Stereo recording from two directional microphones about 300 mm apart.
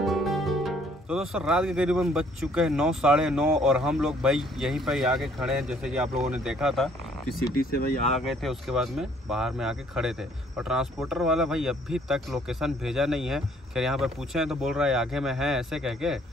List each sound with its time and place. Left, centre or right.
0.0 s speech: centre
7.3 s speech: left
8.3 s speech: centre